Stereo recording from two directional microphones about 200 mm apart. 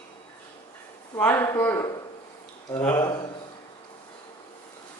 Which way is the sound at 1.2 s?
10° left (ahead or behind).